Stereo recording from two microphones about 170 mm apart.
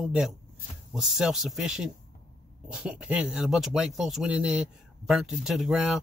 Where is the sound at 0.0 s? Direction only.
Centre (ahead or behind).